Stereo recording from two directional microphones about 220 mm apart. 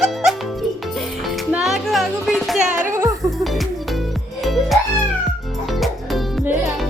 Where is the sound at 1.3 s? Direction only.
Centre (ahead or behind).